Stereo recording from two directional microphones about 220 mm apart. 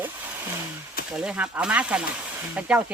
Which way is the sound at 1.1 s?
5° right (ahead or behind).